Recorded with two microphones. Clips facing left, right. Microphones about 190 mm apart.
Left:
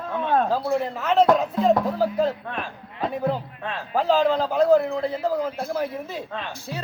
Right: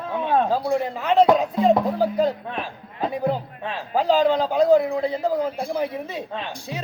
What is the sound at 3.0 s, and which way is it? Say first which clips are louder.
Speech: right 1 dB; 5° right (ahead or behind).